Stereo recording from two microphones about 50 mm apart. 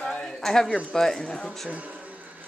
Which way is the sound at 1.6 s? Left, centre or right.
Right.